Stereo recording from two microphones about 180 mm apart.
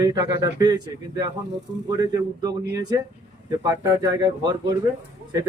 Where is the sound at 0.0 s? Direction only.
20° right (ahead or behind).